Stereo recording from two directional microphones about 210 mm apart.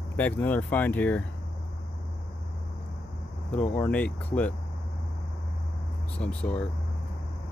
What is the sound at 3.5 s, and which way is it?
Speech, 5° left (ahead or behind).